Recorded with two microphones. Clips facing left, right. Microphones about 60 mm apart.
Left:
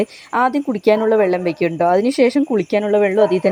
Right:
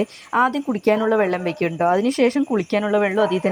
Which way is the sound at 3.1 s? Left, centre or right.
Left.